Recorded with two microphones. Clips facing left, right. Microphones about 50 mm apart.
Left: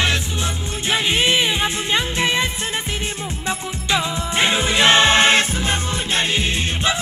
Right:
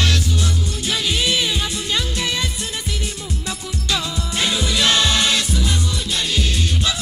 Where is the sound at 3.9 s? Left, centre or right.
Left.